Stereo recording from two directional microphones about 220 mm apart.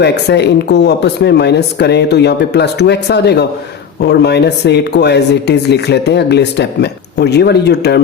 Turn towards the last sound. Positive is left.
turn(degrees=50)  # may be behind; listen again after turning